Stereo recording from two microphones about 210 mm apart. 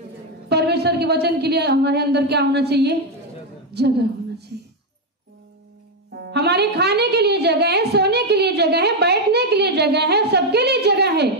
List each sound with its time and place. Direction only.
0.5 s a woman's voice: 50° right (ahead or behind)
6.1 s a woman's voice: 50° right (ahead or behind)